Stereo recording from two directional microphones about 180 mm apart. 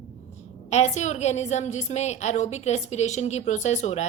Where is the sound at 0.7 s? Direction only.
40° left (ahead or behind).